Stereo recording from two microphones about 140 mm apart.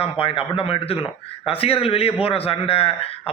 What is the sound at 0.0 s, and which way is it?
A man's voice, 45° left (ahead or behind).